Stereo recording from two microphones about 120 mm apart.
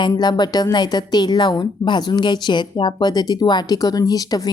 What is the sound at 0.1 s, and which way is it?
A woman's voice, 35° left (ahead or behind).